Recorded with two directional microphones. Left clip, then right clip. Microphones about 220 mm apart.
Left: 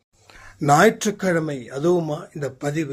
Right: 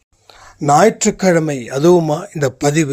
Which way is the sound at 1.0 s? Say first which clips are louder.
Right 8 dB; 30° right (ahead or behind).